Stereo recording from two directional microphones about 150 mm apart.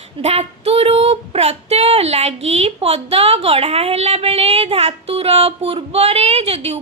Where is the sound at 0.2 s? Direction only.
45° right (ahead or behind).